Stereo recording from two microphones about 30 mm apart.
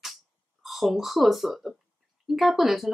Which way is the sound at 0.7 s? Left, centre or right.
Centre.